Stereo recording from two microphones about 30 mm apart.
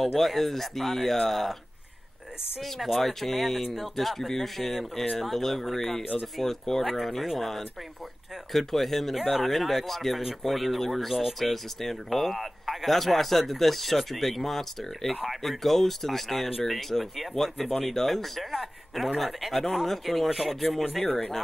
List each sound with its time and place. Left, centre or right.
0.1 s speech: centre
2.6 s speech: centre
21.1 s speech: centre